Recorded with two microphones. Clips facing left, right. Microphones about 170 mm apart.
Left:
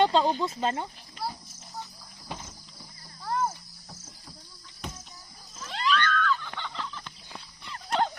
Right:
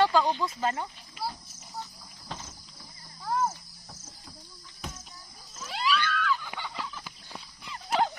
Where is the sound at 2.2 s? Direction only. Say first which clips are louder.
Left 1 dB; 10° left (ahead or behind).